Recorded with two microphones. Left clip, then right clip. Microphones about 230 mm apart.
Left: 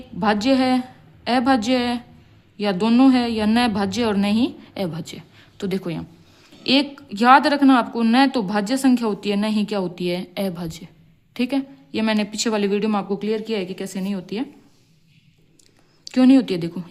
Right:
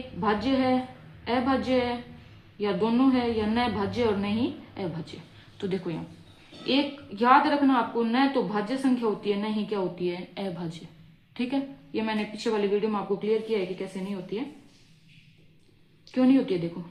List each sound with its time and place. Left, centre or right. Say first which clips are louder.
0.2 s a woman's voice: left 7 dB; left
16.1 s a woman's voice: left 7 dB; left